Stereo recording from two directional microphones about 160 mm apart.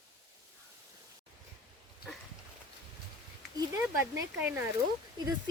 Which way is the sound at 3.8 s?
15° right (ahead or behind).